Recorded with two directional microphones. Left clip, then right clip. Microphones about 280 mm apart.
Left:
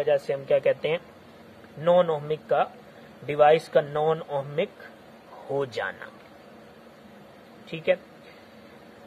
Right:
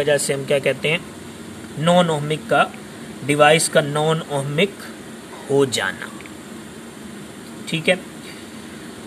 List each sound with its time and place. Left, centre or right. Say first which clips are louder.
0.0 s speech: right 5 dB; left
7.7 s speech: right 6 dB; left